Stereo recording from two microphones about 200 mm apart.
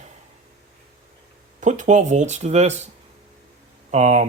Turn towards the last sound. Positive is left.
turn(degrees=-35)  # may be behind; listen again after turning